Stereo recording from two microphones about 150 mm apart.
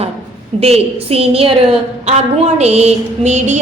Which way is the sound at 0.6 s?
40° right (ahead or behind).